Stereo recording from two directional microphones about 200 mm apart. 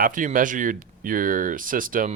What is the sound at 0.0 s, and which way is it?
Speech, 40° right (ahead or behind).